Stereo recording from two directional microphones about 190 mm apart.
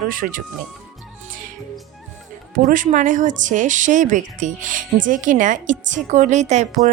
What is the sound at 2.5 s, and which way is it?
A woman's voice, 45° right (ahead or behind).